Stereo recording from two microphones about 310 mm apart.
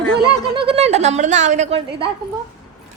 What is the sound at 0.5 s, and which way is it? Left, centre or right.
Speech, centre.